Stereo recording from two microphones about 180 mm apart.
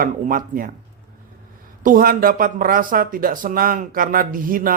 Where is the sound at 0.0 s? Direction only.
50° right (ahead or behind).